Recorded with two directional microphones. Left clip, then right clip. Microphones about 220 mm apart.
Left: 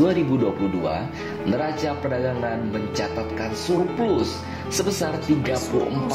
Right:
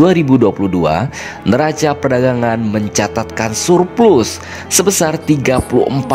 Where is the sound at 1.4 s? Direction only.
50° right (ahead or behind).